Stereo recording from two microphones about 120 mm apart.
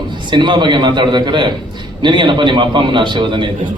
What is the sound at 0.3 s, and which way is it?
A man's voice, 40° right (ahead or behind).